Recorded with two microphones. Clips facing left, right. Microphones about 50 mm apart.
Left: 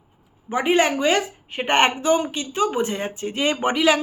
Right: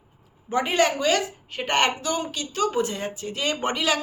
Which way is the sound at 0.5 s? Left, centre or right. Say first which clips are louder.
Left 3 dB; left.